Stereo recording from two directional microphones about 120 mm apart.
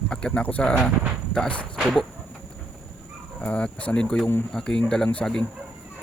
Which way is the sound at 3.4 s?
10° left (ahead or behind).